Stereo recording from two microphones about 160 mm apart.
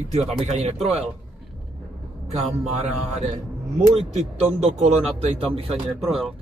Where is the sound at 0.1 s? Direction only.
40° right (ahead or behind).